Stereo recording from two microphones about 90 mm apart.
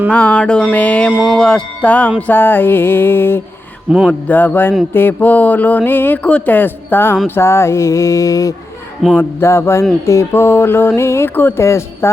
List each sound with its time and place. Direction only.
0.1 s mantra: 15° left (ahead or behind)
1.4 s speech: 10° left (ahead or behind); by 3.4 s 25° left (ahead or behind)
3.9 s speech: 10° right (ahead or behind)
4.3 s speech: 20° left (ahead or behind)
7.3 s mantra: 30° left (ahead or behind)
9.1 s speech: 30° left (ahead or behind)